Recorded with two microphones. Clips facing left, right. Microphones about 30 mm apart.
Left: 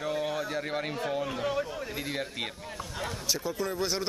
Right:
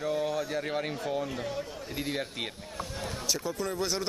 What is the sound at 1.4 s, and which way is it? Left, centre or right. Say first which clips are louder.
Speech: left 5 dB; left.